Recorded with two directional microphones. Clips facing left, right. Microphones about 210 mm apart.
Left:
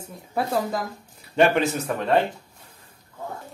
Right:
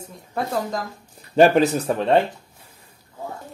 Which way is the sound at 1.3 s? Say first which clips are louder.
Right 5 dB; 40° right (ahead or behind).